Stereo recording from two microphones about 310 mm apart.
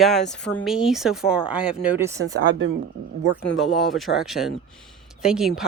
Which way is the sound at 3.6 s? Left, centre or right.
Centre.